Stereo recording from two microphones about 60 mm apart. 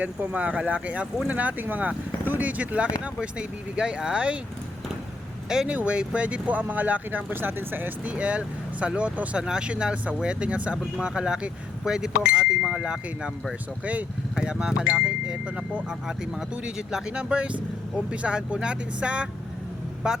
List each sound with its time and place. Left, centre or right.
0.0 s speech: right
5.6 s speech: centre
14.3 s speech: centre